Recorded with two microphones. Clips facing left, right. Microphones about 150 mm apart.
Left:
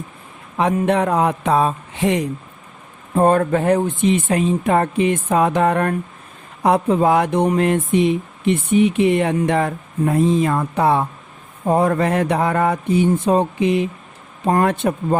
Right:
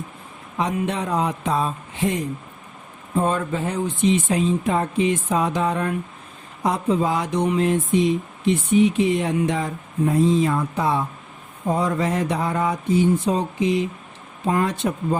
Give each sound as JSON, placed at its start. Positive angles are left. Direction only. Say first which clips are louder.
{"t": 0.9, "sound": "speech", "louder": "left 7 dB", "side_deg": 60}
{"t": 3.2, "sound": "speech", "louder": "left 7 dB", "side_deg": 55}